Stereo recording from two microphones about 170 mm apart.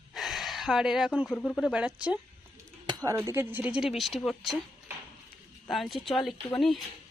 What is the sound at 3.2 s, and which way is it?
Speech, 10° right (ahead or behind).